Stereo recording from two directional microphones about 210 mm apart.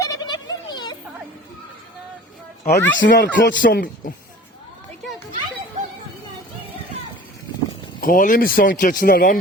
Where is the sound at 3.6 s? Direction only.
40° left (ahead or behind).